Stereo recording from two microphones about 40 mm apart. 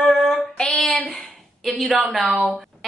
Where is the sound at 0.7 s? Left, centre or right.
Left.